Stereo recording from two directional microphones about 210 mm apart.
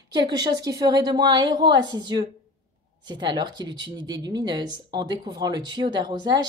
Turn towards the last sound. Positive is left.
turn(degrees=-20)  # may be behind; listen again after turning